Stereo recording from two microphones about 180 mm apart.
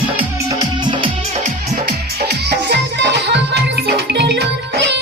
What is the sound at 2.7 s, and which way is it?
Music, 70° right (ahead or behind).